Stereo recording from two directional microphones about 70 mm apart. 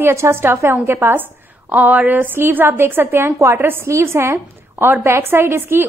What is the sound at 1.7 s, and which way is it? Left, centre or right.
A woman's voice, right.